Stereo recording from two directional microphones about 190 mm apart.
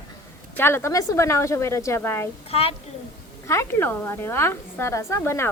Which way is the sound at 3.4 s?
15° left (ahead or behind).